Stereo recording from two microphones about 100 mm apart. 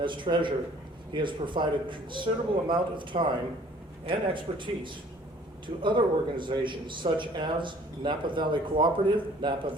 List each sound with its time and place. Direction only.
0.0 s a man's voice: 55° right (ahead or behind)